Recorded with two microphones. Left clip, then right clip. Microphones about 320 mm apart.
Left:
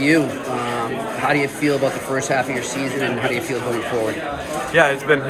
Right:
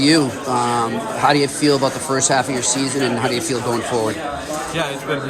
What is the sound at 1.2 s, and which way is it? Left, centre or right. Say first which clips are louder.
Speech: right 4 dB; centre.